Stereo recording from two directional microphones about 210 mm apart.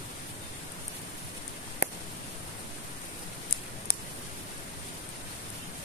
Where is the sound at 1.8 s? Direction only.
50° left (ahead or behind).